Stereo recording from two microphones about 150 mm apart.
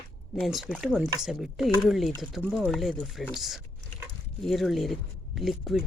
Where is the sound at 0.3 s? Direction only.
Centre (ahead or behind).